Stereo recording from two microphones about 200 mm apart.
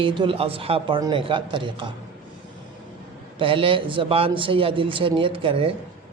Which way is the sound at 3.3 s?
25° right (ahead or behind).